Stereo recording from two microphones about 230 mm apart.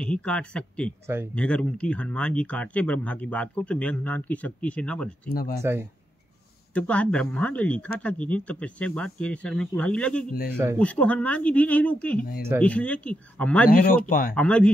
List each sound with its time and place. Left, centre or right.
0.0 s speech: centre
5.3 s speech: left
5.6 s speech: centre
6.7 s speech: centre
13.7 s speech: left
14.3 s speech: centre